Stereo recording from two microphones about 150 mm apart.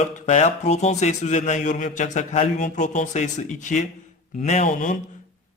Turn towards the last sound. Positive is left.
turn(degrees=55)  # may be behind; listen again after turning